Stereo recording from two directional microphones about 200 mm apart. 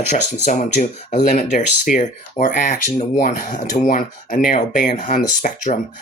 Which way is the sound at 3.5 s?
40° left (ahead or behind).